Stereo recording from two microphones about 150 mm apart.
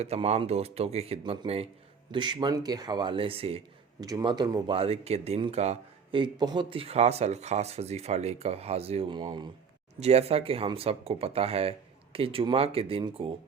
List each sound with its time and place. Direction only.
0.0 s speech: 45° right (ahead or behind)
4.0 s speech: 25° right (ahead or behind)
4.7 s a man's voice: 40° right (ahead or behind)
9.1 s speech: 30° right (ahead or behind)
10.0 s speech: 45° right (ahead or behind)